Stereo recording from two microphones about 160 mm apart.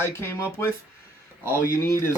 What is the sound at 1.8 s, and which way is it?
Speech, 15° left (ahead or behind).